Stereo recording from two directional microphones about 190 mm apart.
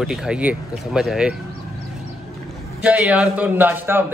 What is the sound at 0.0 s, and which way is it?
Speech, 5° right (ahead or behind).